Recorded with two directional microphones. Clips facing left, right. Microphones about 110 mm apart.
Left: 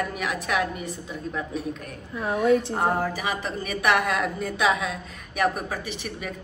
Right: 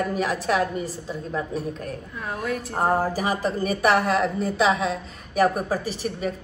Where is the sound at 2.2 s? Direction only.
30° left (ahead or behind).